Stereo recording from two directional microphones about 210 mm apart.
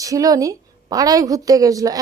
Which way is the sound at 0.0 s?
15° right (ahead or behind).